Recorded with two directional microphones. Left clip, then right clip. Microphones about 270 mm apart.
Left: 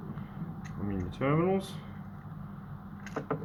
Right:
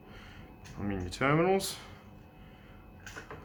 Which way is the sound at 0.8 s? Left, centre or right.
Left.